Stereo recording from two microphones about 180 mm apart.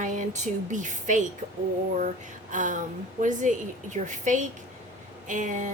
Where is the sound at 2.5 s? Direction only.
45° right (ahead or behind).